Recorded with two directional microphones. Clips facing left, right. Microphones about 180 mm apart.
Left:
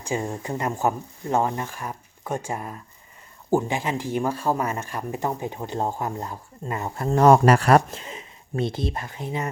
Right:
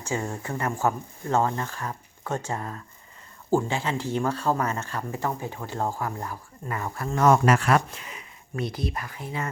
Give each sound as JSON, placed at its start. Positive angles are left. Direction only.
{"t": 0.0, "sound": "speech", "side_deg": 15}
{"t": 7.1, "sound": "speech", "side_deg": 35}
{"t": 8.0, "sound": "speech", "side_deg": 25}